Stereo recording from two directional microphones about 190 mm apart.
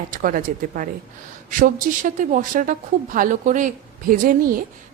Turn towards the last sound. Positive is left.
turn(degrees=-50)  # may be behind; listen again after turning